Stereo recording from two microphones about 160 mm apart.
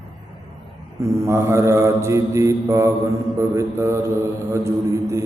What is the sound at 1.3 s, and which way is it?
Mantra, 15° right (ahead or behind).